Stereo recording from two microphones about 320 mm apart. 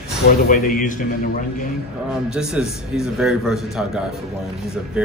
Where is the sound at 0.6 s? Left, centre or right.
Left.